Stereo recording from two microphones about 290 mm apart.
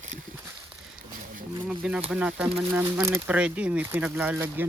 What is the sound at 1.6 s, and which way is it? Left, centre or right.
Speech, centre.